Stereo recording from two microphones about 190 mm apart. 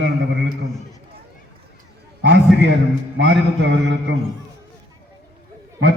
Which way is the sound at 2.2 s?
70° right (ahead or behind).